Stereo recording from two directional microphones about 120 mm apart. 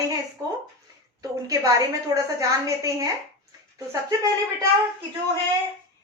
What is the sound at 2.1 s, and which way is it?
Speech, 25° right (ahead or behind).